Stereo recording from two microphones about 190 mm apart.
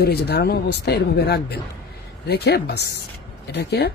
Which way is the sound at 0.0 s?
55° left (ahead or behind).